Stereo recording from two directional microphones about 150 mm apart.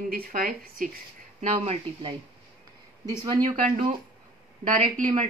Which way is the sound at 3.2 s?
30° right (ahead or behind).